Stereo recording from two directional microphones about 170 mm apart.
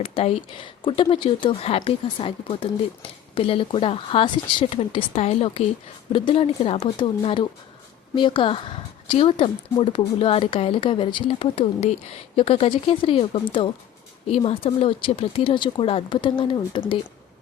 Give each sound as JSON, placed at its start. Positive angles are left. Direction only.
{"t": 0.0, "sound": "a woman's voice", "side_deg": 35}